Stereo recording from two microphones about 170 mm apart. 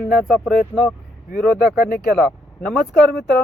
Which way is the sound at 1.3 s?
70° left (ahead or behind).